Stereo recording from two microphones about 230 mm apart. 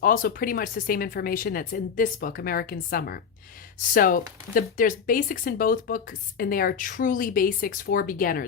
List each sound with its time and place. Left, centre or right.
0.0 s speech: left